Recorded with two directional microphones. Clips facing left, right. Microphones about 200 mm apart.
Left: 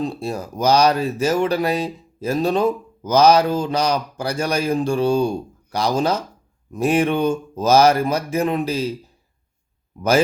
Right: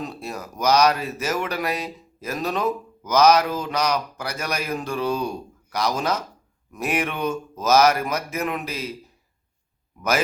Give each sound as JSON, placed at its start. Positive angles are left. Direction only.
{"t": 0.0, "sound": "speech", "side_deg": 30}